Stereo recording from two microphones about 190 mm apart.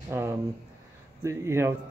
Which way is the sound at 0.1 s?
15° right (ahead or behind).